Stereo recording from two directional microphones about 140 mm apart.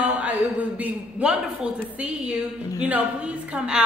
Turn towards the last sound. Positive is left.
turn(degrees=-5)  # may be behind; listen again after turning